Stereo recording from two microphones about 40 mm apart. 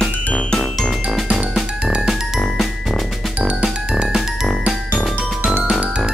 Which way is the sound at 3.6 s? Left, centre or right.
Right.